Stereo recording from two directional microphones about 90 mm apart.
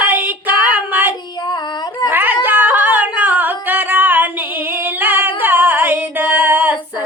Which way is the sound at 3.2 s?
20° right (ahead or behind).